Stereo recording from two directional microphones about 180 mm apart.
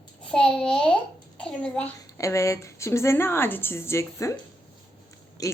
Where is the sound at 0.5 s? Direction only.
5° left (ahead or behind).